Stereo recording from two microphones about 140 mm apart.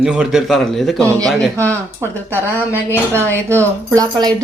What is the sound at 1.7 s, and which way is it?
Speech, 20° right (ahead or behind).